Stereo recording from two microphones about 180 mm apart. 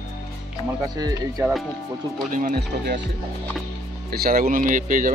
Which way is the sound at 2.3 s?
50° right (ahead or behind).